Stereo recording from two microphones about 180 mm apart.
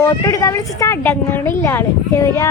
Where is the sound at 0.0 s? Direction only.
20° left (ahead or behind).